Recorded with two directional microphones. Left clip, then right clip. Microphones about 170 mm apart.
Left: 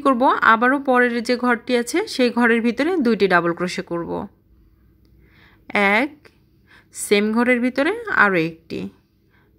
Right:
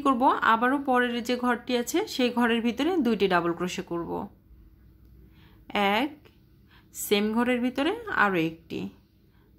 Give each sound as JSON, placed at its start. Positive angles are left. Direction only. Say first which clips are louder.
{"t": 0.0, "sound": "speech", "louder": "left 7 dB", "side_deg": 30}
{"t": 5.3, "sound": "a woman's voice", "louder": "left 8 dB", "side_deg": 30}